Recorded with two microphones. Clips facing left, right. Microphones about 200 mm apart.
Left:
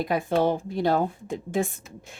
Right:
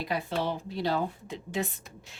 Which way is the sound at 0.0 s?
50° left (ahead or behind).